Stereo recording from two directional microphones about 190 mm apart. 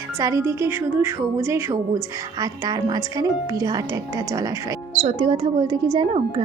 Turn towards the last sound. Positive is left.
turn(degrees=-20)  # may be behind; listen again after turning